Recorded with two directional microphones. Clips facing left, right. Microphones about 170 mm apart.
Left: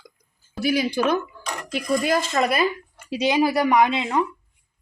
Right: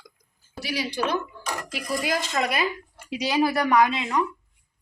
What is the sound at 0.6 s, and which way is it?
Speech, 50° left (ahead or behind).